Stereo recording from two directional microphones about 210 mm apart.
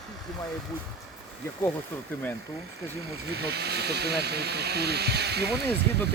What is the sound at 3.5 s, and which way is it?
Speech, 50° right (ahead or behind).